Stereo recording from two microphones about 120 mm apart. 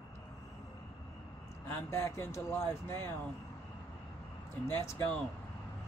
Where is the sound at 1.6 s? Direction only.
20° left (ahead or behind).